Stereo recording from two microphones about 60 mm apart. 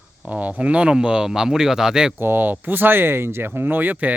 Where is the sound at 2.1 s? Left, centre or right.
Right.